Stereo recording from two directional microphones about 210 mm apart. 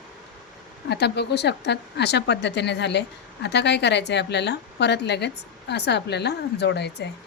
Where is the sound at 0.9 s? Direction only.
50° left (ahead or behind).